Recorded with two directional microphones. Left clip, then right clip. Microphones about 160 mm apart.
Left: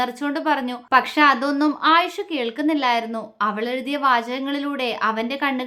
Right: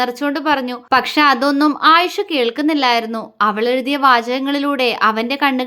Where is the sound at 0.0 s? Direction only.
25° right (ahead or behind).